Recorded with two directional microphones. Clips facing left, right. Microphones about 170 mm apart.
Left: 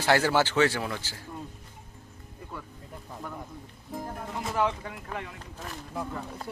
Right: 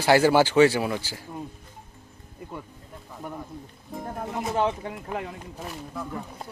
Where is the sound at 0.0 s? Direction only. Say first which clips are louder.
Right 5 dB; 10° right (ahead or behind).